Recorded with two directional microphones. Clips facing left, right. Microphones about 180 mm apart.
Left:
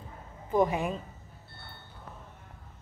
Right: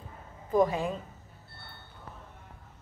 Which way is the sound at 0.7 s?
20° left (ahead or behind).